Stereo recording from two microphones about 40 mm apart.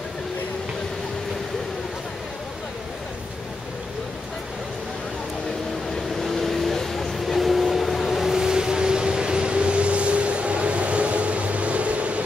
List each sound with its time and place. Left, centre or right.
6.1 s vehicle: centre; by 12.2 s right